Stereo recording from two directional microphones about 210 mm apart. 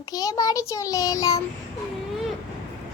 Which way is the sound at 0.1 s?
15° left (ahead or behind).